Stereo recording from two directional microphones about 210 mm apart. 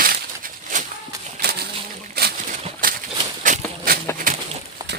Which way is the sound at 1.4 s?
50° right (ahead or behind).